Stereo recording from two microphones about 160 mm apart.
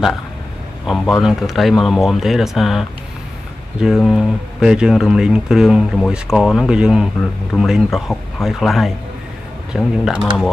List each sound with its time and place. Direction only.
0.8 s speech: centre (ahead or behind)